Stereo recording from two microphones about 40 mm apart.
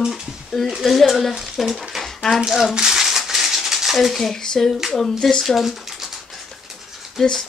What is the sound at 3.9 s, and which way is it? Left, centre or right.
Speech, centre.